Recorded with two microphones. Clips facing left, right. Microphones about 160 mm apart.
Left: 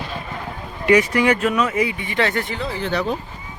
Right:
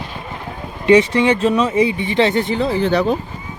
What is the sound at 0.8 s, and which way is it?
Speech, 25° right (ahead or behind).